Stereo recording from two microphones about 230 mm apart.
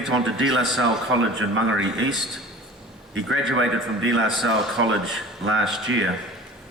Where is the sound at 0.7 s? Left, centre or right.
Right.